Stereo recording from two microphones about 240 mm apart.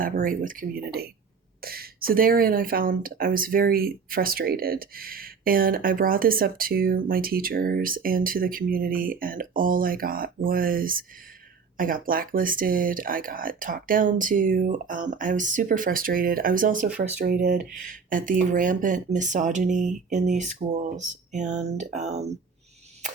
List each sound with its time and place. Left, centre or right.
0.0 s speech: right